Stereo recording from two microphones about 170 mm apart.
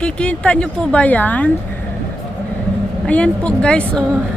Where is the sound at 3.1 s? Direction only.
5° left (ahead or behind).